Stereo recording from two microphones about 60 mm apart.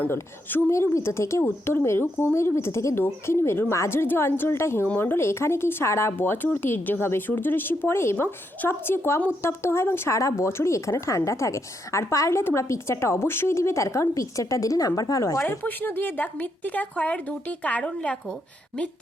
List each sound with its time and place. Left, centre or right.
0.7 s speech: left
10.2 s speech: left
14.1 s speech: left
15.6 s speech: left